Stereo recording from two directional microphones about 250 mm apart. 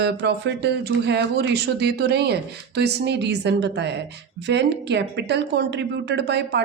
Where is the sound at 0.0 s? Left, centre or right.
Right.